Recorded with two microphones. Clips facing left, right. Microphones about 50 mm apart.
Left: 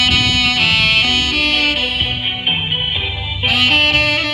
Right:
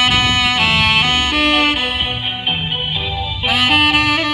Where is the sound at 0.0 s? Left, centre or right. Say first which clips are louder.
Right 1 dB; right.